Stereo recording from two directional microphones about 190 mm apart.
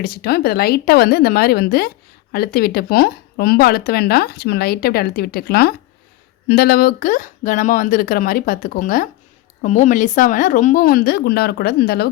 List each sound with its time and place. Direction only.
0.0 s speech: 55° left (ahead or behind)